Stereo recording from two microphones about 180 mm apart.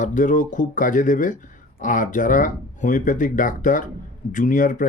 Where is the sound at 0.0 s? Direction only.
45° left (ahead or behind).